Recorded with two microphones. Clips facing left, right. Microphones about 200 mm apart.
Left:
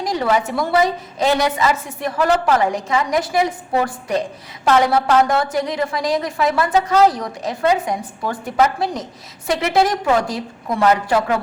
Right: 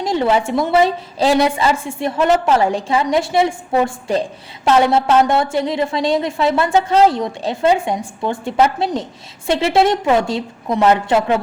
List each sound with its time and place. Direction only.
0.0 s a woman's voice: 25° right (ahead or behind)